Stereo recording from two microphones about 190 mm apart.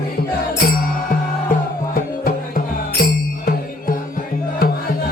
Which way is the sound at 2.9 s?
50° left (ahead or behind).